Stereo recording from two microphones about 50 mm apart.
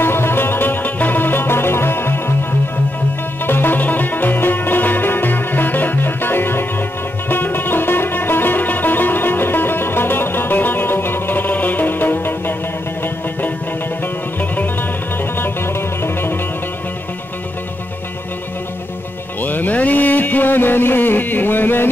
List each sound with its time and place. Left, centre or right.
0.0 s music: left
3.4 s music: left
14.5 s music: left
15.3 s music: left
19.4 s music: left